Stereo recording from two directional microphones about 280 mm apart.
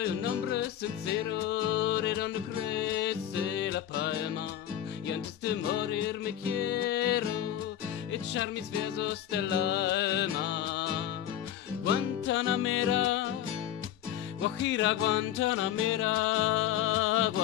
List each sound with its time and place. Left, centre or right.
0.0 s music: left
12.3 s music: left
14.6 s music: left